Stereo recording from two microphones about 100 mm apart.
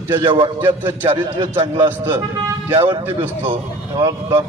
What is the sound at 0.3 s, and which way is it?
Speech, 55° right (ahead or behind).